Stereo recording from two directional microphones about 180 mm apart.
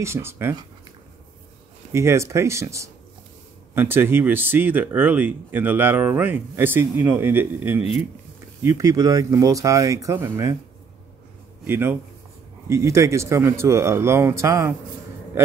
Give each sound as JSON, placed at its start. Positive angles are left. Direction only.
{"t": 0.0, "sound": "speech", "side_deg": -15}
{"t": 1.9, "sound": "speech", "side_deg": -15}
{"t": 11.6, "sound": "speech", "side_deg": -10}